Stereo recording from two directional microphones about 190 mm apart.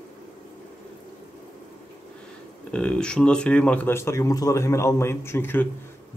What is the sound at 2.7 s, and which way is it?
A man's voice, 5° left (ahead or behind).